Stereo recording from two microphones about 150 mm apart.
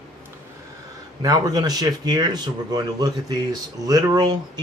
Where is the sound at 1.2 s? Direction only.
25° right (ahead or behind).